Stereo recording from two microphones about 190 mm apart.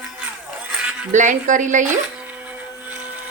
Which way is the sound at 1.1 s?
40° right (ahead or behind).